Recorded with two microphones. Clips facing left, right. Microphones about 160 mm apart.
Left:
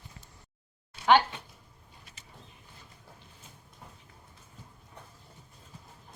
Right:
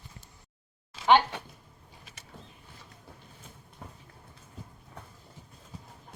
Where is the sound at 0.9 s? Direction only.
90° right.